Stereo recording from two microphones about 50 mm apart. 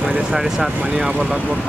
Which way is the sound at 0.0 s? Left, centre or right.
Centre.